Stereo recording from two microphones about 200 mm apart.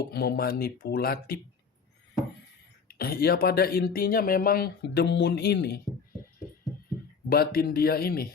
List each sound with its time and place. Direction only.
0.1 s speech: 50° left (ahead or behind)
3.0 s speech: 50° left (ahead or behind)
7.3 s speech: 50° left (ahead or behind)